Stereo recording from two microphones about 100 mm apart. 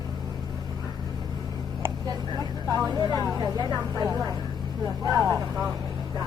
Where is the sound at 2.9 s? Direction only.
40° right (ahead or behind).